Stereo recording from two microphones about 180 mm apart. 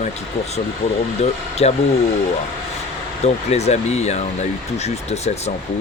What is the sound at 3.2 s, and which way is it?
Speech, 35° left (ahead or behind).